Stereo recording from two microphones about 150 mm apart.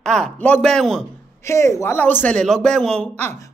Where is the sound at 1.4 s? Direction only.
20° left (ahead or behind).